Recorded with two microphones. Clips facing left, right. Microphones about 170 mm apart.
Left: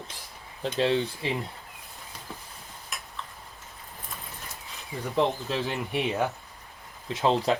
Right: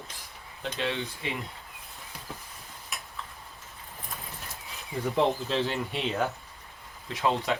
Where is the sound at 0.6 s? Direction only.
35° left (ahead or behind).